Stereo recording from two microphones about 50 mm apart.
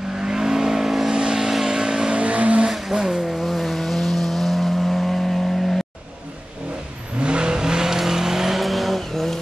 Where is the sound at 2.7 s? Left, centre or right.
Centre.